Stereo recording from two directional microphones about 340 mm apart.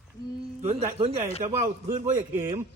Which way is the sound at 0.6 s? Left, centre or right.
Centre.